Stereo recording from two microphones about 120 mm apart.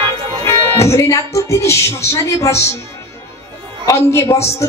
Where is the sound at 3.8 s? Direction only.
25° left (ahead or behind).